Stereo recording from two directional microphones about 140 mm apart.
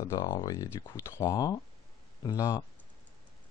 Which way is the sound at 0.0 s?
25° left (ahead or behind).